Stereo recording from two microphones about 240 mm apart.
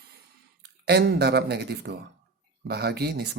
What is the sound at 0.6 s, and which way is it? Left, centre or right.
Speech, right.